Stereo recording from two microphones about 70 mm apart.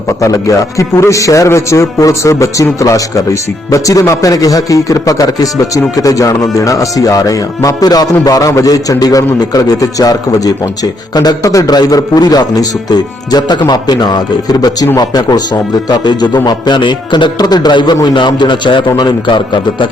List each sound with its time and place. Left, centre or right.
0.2 s a man's voice: left
7.9 s a man's voice: left
11.1 s a man's voice: left
11.4 s a man's voice: left
11.7 s a man's voice: left
16.0 s speech: left